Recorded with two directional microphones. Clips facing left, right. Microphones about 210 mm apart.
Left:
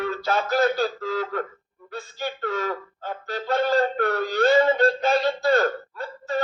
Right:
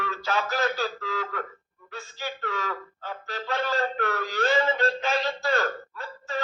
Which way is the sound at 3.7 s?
35° left (ahead or behind).